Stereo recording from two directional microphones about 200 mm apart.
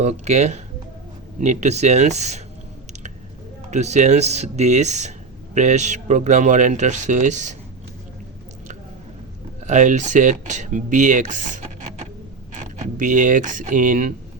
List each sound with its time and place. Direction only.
0.0 s speech: 35° right (ahead or behind)
3.7 s speech: 35° right (ahead or behind)
9.6 s speech: 35° right (ahead or behind)